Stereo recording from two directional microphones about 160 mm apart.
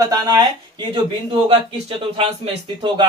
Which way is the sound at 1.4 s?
35° right (ahead or behind).